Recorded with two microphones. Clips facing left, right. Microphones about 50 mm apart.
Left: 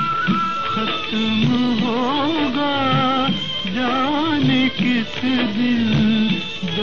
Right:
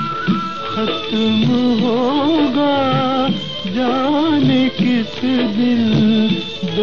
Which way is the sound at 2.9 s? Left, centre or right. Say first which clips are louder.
Right 2 dB; left.